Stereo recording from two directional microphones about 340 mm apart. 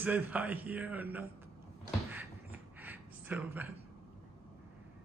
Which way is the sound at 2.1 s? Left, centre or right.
Centre.